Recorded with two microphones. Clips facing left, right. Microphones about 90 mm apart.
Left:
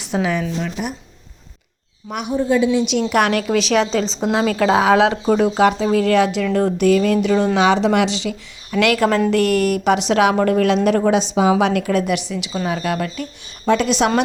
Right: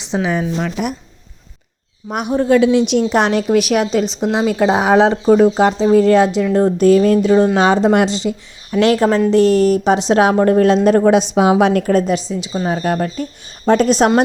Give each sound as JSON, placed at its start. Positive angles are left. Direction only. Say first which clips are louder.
{"t": 0.0, "sound": "speech", "louder": "right 2 dB", "side_deg": -25}
{"t": 0.5, "sound": "speech", "louder": "right 4 dB", "side_deg": -75}
{"t": 2.0, "sound": "a woman's voice", "louder": "right 4 dB", "side_deg": -45}
{"t": 2.3, "sound": "speech", "louder": "right 4 dB", "side_deg": -70}
{"t": 2.7, "sound": "a woman's voice", "louder": "right 4 dB", "side_deg": -50}
{"t": 3.1, "sound": "speech", "louder": "right 3 dB", "side_deg": -25}
{"t": 3.6, "sound": "speech", "louder": "right 2 dB", "side_deg": -10}
{"t": 11.0, "sound": "a woman's voice", "louder": "right 4 dB", "side_deg": -55}
{"t": 11.6, "sound": "a woman's voice", "louder": "right 4 dB", "side_deg": -45}